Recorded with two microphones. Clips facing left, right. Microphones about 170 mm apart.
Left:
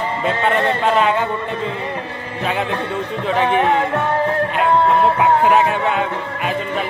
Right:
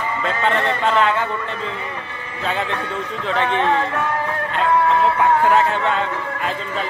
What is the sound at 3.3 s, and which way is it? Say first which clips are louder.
Speech: left 3 dB; 15° left (ahead or behind).